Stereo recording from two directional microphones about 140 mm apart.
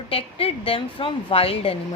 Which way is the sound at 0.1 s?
40° left (ahead or behind).